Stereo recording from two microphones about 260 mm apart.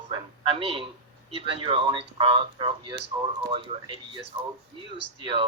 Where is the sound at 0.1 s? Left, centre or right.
Right.